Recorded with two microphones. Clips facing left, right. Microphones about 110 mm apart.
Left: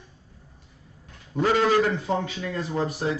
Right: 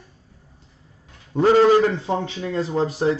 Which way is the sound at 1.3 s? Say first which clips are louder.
Right 6 dB; 30° right (ahead or behind).